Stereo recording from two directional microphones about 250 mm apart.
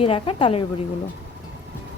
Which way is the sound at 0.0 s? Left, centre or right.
Left.